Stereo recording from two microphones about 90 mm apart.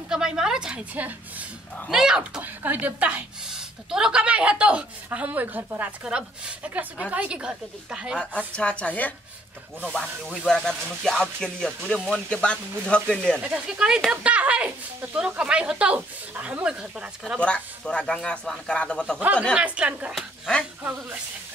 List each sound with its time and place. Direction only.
0.1 s a woman's voice: 5° right (ahead or behind)
2.4 s a woman's voice: 20° right (ahead or behind)
3.4 s a woman's voice: 5° right (ahead or behind)
8.5 s speech: 15° left (ahead or behind)
13.7 s a woman's voice: 10° right (ahead or behind)
17.4 s speech: 15° left (ahead or behind)
19.5 s a woman's voice: 15° right (ahead or behind)
20.2 s speech: 5° left (ahead or behind)